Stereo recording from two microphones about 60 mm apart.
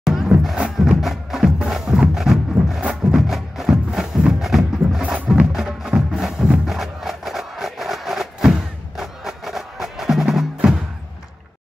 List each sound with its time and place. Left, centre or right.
0.0 s music: centre
2.8 s music: centre
3.2 s music: centre
5.0 s music: right
5.5 s music: centre